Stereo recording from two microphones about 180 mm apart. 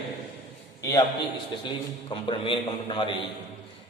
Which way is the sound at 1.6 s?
30° left (ahead or behind).